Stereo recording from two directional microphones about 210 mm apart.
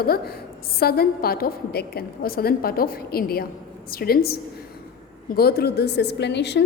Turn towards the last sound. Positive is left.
turn(degrees=55)  # may be behind; listen again after turning